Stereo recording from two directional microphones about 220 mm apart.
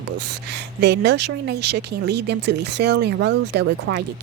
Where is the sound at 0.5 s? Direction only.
50° right (ahead or behind).